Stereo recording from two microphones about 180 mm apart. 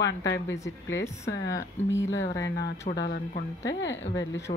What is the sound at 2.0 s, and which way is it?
Speech, 90° left.